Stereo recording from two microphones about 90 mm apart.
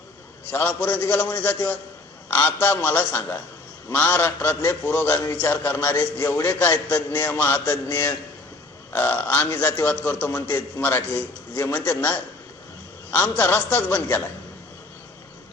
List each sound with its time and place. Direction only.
0.4 s a man's voice: 20° left (ahead or behind)